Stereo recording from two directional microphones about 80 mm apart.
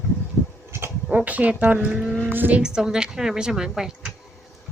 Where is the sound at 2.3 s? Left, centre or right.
Right.